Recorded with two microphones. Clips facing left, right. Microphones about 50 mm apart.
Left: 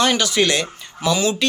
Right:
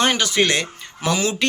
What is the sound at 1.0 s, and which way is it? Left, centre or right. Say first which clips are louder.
Speech: left 2 dB; right.